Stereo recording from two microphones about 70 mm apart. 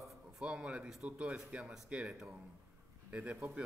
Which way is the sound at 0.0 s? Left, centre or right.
Centre.